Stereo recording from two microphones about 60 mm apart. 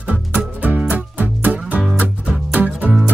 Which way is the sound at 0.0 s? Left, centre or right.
Right.